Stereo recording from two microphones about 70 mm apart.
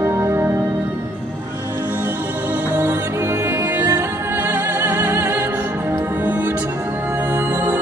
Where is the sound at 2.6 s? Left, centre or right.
Right.